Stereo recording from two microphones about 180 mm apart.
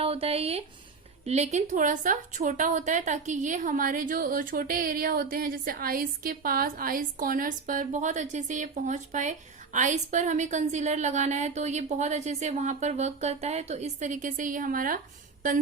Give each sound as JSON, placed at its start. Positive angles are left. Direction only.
{"t": 0.0, "sound": "a woman's voice", "side_deg": -30}